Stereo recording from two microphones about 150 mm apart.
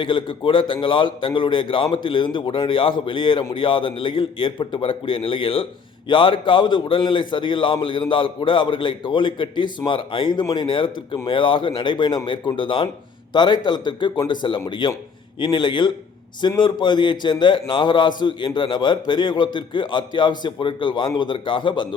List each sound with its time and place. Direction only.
0.0 s a man's voice: 35° left (ahead or behind)